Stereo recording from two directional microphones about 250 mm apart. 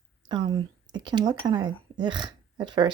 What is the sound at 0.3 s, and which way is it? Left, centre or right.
Speech, centre.